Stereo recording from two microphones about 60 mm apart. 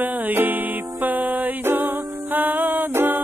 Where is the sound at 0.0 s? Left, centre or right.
Right.